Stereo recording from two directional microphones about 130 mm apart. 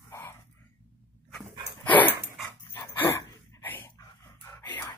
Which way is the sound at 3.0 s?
20° left (ahead or behind).